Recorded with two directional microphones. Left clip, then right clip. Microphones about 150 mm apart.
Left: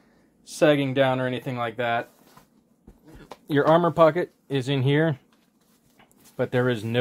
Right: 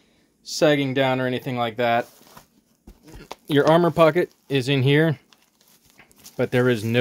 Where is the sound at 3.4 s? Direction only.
40° right (ahead or behind).